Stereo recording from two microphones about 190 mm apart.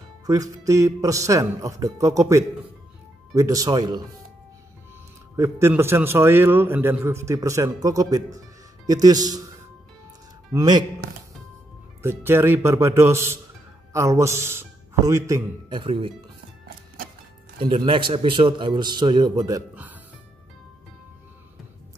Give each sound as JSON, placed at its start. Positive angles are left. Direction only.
{"t": 0.3, "sound": "a man's voice", "side_deg": -15}
{"t": 5.3, "sound": "a man's voice", "side_deg": -15}
{"t": 10.5, "sound": "speech", "side_deg": -20}
{"t": 12.0, "sound": "a man's voice", "side_deg": -10}
{"t": 15.8, "sound": "a man's voice", "side_deg": -30}
{"t": 16.6, "sound": "music", "side_deg": -50}
{"t": 17.6, "sound": "a man's voice", "side_deg": -25}
{"t": 19.7, "sound": "music", "side_deg": -10}